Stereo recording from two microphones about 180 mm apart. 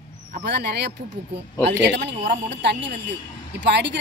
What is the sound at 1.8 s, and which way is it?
A woman's voice, 75° right (ahead or behind).